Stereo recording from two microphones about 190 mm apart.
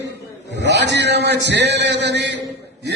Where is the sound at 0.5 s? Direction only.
65° right (ahead or behind).